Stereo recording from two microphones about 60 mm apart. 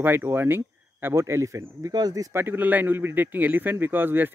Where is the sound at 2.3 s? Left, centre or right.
Right.